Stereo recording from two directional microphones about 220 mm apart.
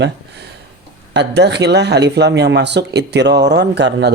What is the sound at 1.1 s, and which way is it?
Speech, 50° right (ahead or behind).